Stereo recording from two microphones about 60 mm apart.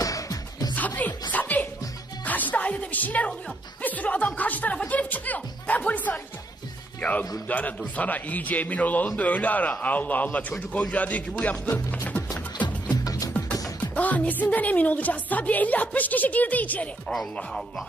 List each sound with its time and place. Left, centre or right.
0.0 s music: left
0.7 s music: left
3.8 s a woman's voice: left
13.0 s music: left
13.9 s a woman's voice: left